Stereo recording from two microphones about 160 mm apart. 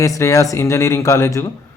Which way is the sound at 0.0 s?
20° left (ahead or behind).